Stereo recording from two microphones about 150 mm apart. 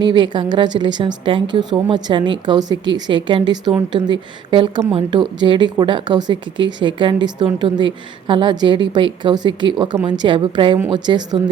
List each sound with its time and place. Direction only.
0.0 s a woman's voice: 30° right (ahead or behind)